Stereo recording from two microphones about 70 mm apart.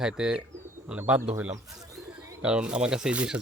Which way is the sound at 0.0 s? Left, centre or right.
Centre.